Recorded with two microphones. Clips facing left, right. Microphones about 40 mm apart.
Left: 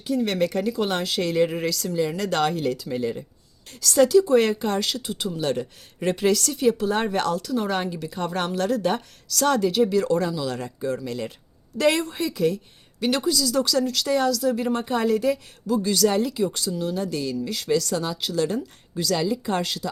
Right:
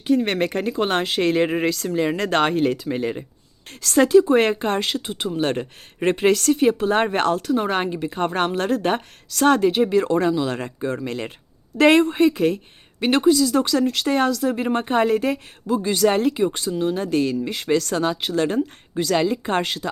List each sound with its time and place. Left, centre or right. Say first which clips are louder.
0.0 s speech: right 3 dB; right